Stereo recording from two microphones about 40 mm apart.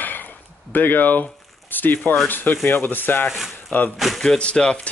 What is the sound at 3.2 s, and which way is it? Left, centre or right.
Speech, centre.